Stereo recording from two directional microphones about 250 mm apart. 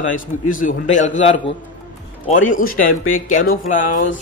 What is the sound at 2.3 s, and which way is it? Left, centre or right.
Speech, left.